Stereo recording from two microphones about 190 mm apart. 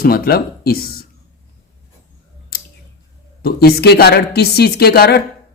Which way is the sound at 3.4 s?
55° left (ahead or behind).